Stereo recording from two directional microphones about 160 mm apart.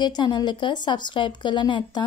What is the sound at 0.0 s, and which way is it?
Speech, 30° left (ahead or behind).